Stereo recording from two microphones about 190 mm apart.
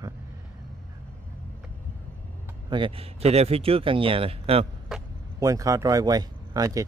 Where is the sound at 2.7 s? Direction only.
30° right (ahead or behind).